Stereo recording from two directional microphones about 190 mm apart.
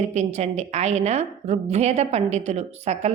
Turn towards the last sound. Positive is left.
turn(degrees=-35)  # may be behind; listen again after turning